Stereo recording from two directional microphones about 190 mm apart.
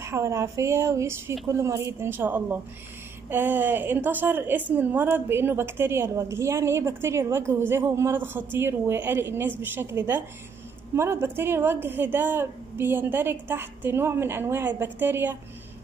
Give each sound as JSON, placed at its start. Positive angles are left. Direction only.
{"t": 0.0, "sound": "a woman's voice", "side_deg": -15}